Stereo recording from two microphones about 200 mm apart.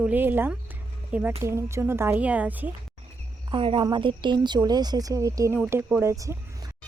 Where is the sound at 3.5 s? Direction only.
25° right (ahead or behind).